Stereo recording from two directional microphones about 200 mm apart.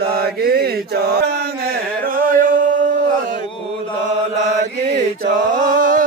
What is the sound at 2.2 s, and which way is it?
Singing, 40° right (ahead or behind).